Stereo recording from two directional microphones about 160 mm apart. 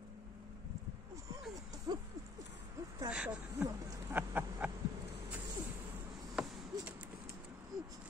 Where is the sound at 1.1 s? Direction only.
20° right (ahead or behind).